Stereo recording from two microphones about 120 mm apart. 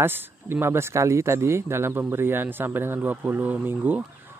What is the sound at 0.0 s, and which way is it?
Speech, 20° right (ahead or behind).